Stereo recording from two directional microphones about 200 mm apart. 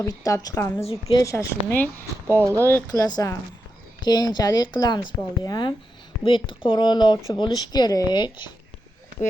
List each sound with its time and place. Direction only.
0.0 s a woman's voice: 15° left (ahead or behind)
0.9 s speech: 30° left (ahead or behind)
1.2 s a woman's voice: 15° left (ahead or behind)
2.2 s speech: 15° right (ahead or behind)
2.6 s a woman's voice: 15° left (ahead or behind)